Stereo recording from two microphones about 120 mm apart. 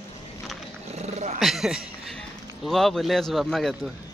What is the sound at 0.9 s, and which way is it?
Dog, 65° right (ahead or behind).